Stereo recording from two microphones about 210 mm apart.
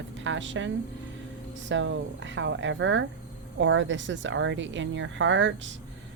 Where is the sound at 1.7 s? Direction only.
60° right (ahead or behind).